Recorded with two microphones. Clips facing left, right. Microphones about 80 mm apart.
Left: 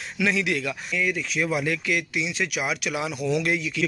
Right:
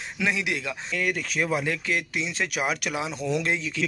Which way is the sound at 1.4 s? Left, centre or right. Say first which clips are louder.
Left 1 dB; right.